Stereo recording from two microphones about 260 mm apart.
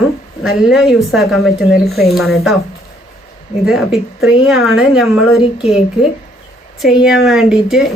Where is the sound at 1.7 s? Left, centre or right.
Left.